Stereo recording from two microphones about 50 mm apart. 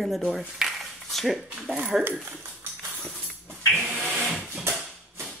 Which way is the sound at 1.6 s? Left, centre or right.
Right.